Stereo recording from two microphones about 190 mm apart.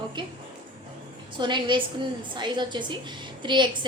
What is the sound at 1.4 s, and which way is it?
A woman's voice, 25° right (ahead or behind).